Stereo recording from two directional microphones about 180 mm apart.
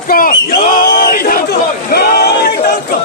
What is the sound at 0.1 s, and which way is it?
Crowd, 50° left (ahead or behind).